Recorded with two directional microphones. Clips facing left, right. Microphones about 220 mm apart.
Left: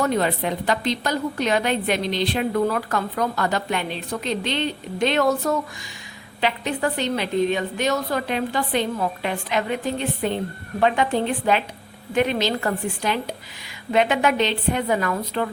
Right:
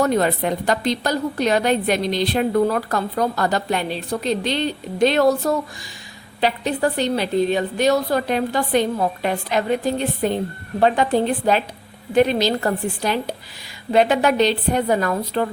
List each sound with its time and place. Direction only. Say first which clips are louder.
0.0 s a woman's voice: right 3 dB; 45° right (ahead or behind)